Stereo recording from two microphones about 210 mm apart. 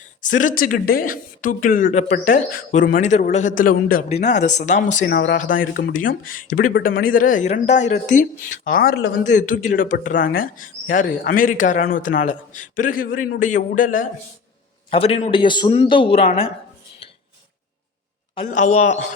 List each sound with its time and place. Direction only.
0.2 s speech: 40° left (ahead or behind)
5.1 s speech: 55° left (ahead or behind)
5.4 s speech: 40° left (ahead or behind)
14.8 s a man's voice: 30° left (ahead or behind)
18.3 s speech: 35° left (ahead or behind)